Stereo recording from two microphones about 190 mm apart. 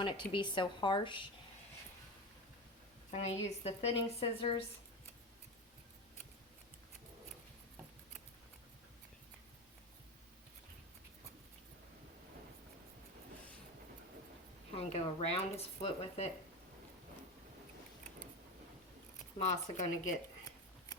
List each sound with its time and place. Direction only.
0.0 s speech: 25° left (ahead or behind)
3.1 s a woman's voice: 35° left (ahead or behind)
14.8 s speech: 30° left (ahead or behind)
19.5 s speech: 40° left (ahead or behind)